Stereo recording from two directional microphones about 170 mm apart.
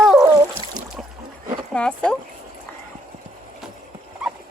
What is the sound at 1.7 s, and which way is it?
Speech, 5° left (ahead or behind).